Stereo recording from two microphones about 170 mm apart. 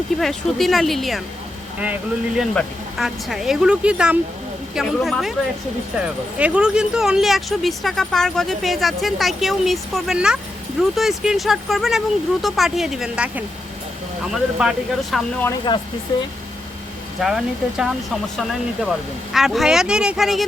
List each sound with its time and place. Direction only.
0.2 s speech: centre (ahead or behind)
6.4 s speech: 5° right (ahead or behind)
14.6 s speech: 5° right (ahead or behind)
15.7 s speech: 25° left (ahead or behind)
17.2 s speech: centre (ahead or behind)